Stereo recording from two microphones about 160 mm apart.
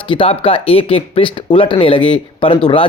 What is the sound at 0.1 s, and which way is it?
Speech, 35° left (ahead or behind).